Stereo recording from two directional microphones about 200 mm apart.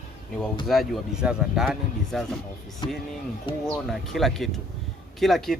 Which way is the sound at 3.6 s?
Centre (ahead or behind).